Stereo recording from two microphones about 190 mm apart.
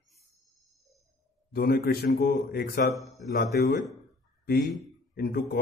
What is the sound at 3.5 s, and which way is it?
Speech, 55° left (ahead or behind).